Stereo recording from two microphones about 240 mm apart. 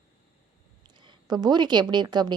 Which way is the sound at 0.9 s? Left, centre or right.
Centre.